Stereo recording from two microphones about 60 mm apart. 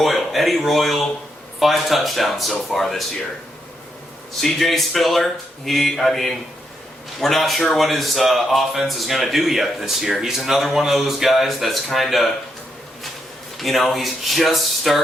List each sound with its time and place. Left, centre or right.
0.0 s speech: centre
4.4 s speech: centre
13.6 s speech: centre